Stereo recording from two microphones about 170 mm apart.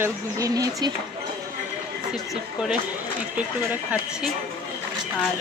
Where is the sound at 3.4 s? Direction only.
10° right (ahead or behind).